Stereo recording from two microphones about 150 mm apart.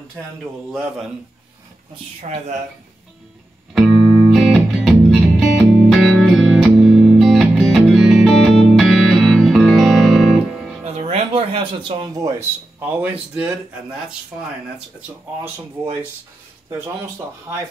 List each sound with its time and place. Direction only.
0.4 s a man's voice: centre (ahead or behind)
4.3 s music: centre (ahead or behind)
11.0 s a sound: 45° right (ahead or behind); by 12.4 s 25° right (ahead or behind)
12.8 s speech: 10° right (ahead or behind)
15.0 s speech: 15° right (ahead or behind)